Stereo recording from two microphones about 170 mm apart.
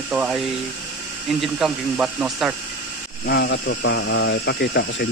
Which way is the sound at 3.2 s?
75° left (ahead or behind).